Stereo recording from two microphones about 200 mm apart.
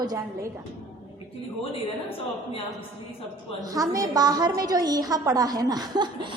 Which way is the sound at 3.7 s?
15° right (ahead or behind).